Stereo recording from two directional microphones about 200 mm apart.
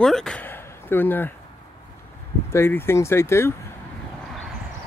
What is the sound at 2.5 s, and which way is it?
Speech, 10° left (ahead or behind).